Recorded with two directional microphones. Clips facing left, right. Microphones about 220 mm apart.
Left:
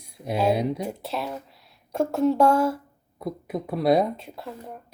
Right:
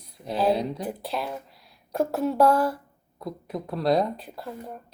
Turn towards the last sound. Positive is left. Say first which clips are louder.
# right 1 dB
turn(degrees=0)  # may be behind; listen again after turning